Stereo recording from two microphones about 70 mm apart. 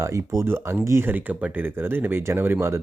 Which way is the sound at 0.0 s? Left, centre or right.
Right.